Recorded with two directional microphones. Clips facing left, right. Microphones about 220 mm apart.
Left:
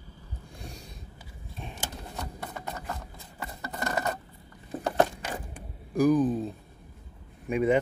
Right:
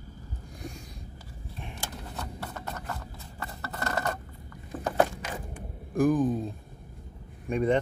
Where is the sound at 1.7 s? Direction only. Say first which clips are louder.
Left 1 dB; 15° left (ahead or behind).